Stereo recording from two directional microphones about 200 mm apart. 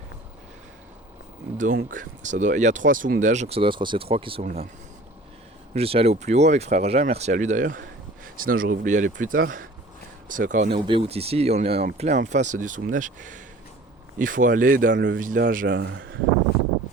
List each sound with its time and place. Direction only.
1.5 s speech: 40° right (ahead or behind)
5.7 s speech: 30° right (ahead or behind)
10.8 s speech: 30° right (ahead or behind); by 16.0 s 55° right (ahead or behind)